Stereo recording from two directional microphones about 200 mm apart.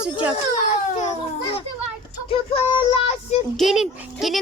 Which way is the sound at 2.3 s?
25° left (ahead or behind).